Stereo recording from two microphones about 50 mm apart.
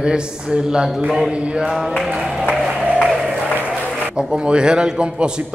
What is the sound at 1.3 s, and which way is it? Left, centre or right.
Speech, right.